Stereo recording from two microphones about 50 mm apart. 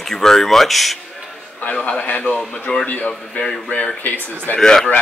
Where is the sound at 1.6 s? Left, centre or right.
Left.